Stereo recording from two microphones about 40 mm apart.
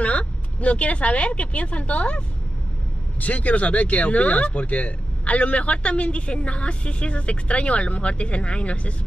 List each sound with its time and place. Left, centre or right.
0.0 s speech: left